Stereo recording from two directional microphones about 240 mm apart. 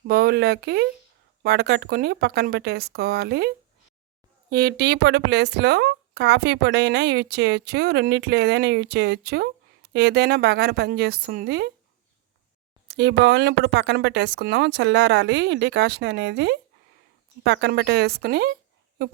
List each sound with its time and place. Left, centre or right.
0.1 s speech: right
12.9 s speech: right